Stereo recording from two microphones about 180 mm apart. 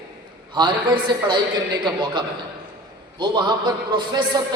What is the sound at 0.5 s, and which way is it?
A man's voice, 25° right (ahead or behind).